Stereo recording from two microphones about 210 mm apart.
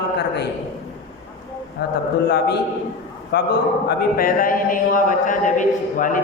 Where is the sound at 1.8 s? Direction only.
50° left (ahead or behind).